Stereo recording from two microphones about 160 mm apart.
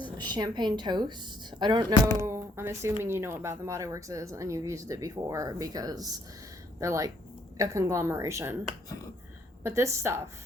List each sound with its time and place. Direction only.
0.2 s a woman's voice: 25° right (ahead or behind)
1.9 s speech: 25° left (ahead or behind)
2.2 s a woman's voice: 15° right (ahead or behind)
9.6 s a woman's voice: 15° right (ahead or behind)